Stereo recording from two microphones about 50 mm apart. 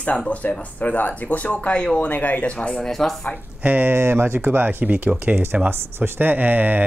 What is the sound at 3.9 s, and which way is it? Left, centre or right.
Speech, right.